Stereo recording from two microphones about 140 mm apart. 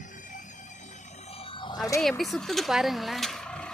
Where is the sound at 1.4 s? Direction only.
35° left (ahead or behind).